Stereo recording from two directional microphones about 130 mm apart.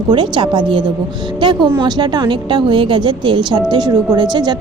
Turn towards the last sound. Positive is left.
turn(degrees=-35)  # may be behind; listen again after turning